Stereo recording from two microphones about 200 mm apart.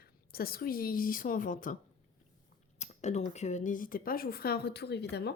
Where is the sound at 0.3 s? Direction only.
50° left (ahead or behind).